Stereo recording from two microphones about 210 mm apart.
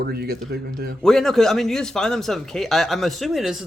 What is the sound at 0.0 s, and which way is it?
Speech, 50° right (ahead or behind).